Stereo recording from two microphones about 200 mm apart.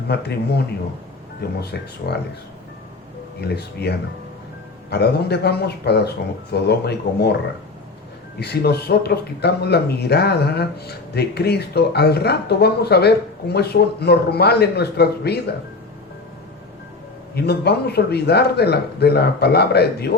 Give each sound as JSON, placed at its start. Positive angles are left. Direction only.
{"t": 0.1, "sound": "speech", "side_deg": 55}
{"t": 3.4, "sound": "speech", "side_deg": 55}
{"t": 8.4, "sound": "speech", "side_deg": 55}
{"t": 17.3, "sound": "speech", "side_deg": 55}